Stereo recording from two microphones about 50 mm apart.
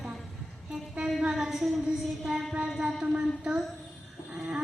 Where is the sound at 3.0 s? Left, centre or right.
Centre.